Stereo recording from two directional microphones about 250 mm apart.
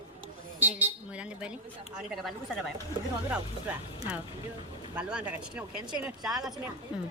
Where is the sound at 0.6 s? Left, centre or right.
Centre.